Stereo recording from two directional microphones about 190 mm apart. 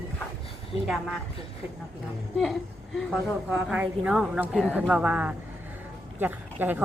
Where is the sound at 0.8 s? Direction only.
Centre (ahead or behind).